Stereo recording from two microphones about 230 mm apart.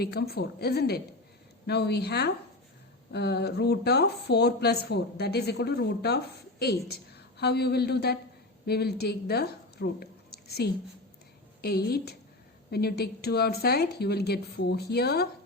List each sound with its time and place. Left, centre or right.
0.0 s a woman's voice: left